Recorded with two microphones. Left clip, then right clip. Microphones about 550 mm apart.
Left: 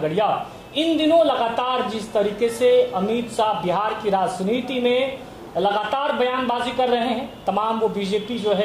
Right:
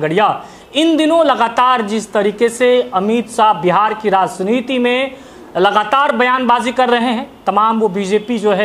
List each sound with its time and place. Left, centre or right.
0.0 s a woman's voice: right